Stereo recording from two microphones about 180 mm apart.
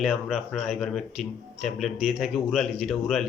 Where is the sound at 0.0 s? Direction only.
Centre (ahead or behind).